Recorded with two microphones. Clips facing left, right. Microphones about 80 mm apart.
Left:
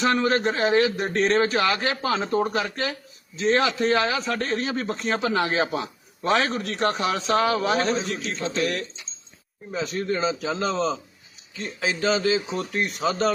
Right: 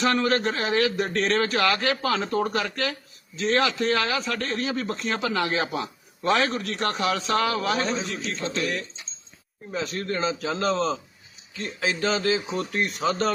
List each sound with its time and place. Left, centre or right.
0.0 s a man's voice: left
7.7 s a man's voice: left
9.7 s a man's voice: centre